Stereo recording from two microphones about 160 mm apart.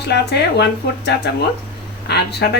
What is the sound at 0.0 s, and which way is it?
Speech, 90° left.